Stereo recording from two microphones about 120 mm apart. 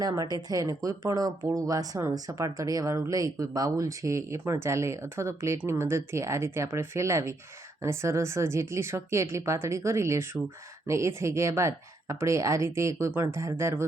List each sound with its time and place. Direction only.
0.0 s speech: 30° right (ahead or behind)